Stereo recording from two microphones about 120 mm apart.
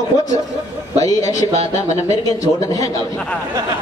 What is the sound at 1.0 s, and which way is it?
A man's voice, 30° left (ahead or behind).